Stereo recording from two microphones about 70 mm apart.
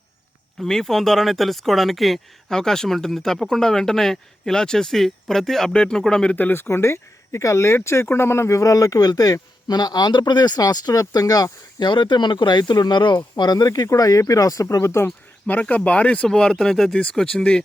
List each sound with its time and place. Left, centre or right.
0.6 s speech: centre
6.3 s speech: left
13.8 s speech: left
15.7 s speech: centre